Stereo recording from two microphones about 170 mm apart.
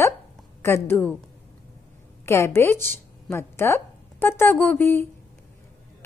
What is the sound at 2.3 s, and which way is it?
A woman's voice, 15° left (ahead or behind).